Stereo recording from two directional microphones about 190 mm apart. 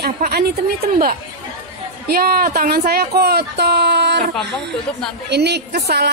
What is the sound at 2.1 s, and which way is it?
Speech, 50° right (ahead or behind).